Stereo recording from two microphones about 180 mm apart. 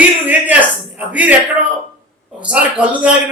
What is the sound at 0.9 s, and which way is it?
A man's voice, 10° right (ahead or behind).